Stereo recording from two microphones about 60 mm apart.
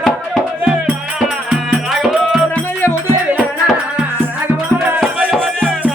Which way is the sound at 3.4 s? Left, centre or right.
Centre.